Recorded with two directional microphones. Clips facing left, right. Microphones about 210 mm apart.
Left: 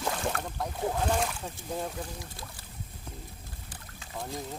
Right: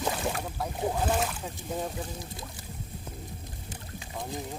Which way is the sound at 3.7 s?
20° right (ahead or behind).